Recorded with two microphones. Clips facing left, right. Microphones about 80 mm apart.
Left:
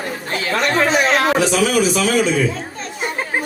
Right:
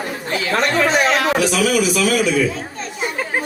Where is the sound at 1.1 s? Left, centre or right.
Left.